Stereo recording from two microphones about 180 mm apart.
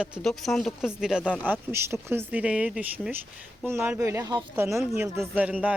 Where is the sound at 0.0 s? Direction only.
Centre (ahead or behind).